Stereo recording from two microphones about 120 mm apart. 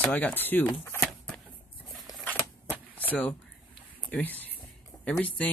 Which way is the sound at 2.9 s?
15° left (ahead or behind).